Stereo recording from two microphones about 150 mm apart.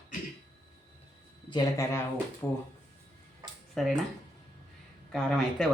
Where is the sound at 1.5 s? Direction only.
25° left (ahead or behind).